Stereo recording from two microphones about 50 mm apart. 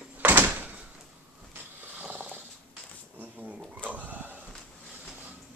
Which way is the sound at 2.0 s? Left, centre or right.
Right.